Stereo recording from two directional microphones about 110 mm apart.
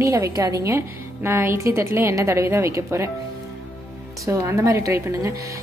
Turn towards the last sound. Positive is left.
turn(degrees=-25)  # may be behind; listen again after turning